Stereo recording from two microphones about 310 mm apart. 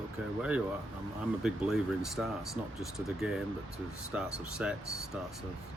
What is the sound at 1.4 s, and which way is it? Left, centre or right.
Speech, centre.